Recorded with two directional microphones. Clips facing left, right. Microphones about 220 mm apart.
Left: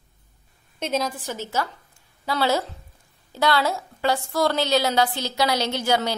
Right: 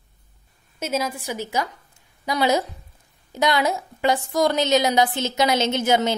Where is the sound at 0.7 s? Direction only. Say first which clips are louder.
Even; 5° right (ahead or behind).